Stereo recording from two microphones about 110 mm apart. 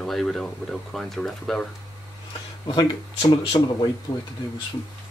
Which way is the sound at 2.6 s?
45° left (ahead or behind).